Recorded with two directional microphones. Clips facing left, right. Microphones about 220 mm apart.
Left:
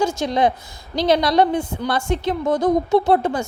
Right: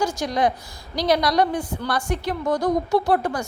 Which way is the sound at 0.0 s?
25° left (ahead or behind).